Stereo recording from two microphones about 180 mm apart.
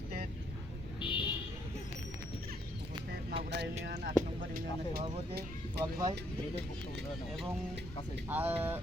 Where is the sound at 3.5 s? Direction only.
70° right (ahead or behind).